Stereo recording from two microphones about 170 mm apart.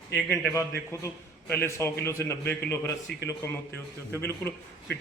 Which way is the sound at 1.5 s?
15° left (ahead or behind).